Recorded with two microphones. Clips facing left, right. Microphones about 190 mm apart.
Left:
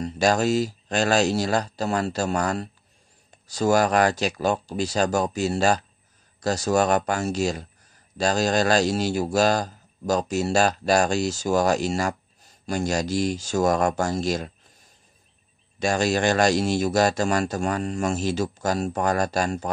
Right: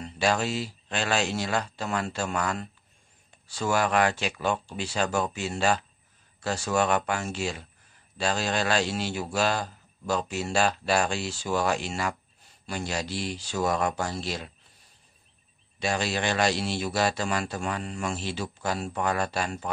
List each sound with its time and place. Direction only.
0.0 s speech: 40° left (ahead or behind)
15.8 s speech: 45° left (ahead or behind)